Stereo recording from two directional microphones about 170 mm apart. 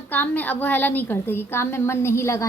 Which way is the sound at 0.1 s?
10° left (ahead or behind).